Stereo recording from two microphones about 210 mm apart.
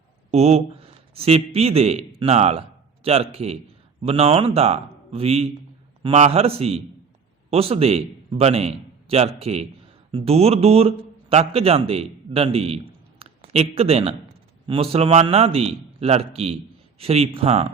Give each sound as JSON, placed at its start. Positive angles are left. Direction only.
{"t": 0.3, "sound": "a man's voice", "side_deg": -30}